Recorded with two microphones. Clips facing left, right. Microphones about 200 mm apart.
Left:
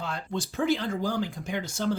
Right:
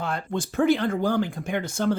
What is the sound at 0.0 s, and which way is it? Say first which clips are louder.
Speech: right 4 dB; 55° right (ahead or behind).